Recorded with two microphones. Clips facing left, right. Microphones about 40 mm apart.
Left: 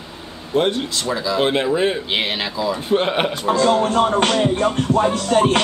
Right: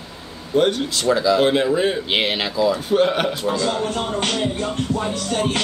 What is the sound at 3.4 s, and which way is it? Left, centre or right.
Speech, left.